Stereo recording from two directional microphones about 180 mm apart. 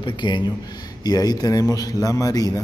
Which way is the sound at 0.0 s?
25° left (ahead or behind).